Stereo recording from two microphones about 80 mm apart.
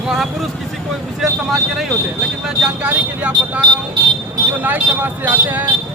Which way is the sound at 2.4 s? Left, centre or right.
Centre.